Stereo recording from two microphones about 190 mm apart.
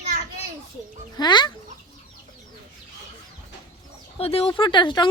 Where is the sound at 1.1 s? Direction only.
20° left (ahead or behind).